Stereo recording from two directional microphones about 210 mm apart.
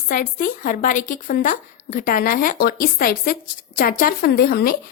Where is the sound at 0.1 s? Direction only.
40° left (ahead or behind).